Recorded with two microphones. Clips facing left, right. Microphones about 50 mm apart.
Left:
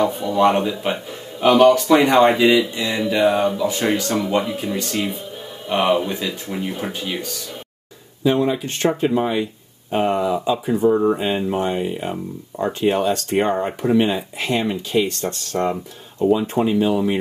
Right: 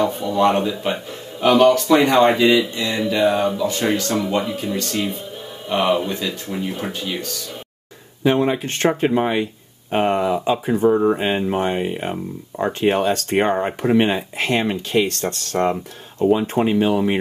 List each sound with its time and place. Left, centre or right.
0.0 s speech: centre
8.2 s speech: right
10.9 s speech: centre
11.1 s speech: right
16.2 s speech: right